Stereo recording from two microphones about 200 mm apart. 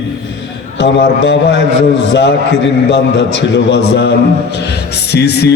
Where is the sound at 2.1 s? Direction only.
60° left (ahead or behind).